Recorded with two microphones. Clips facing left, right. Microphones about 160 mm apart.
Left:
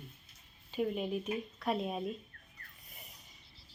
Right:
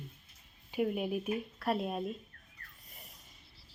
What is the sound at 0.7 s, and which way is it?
Speech, 5° right (ahead or behind).